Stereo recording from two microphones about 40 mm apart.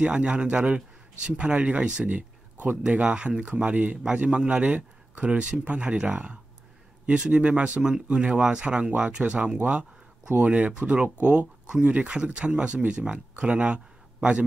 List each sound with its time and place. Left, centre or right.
0.0 s a man's voice: right